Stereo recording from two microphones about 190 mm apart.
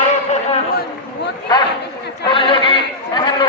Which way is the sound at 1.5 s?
20° left (ahead or behind).